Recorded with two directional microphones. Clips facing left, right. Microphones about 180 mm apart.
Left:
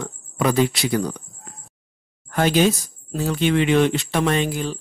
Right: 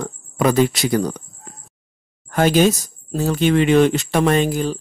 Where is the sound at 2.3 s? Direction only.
45° right (ahead or behind).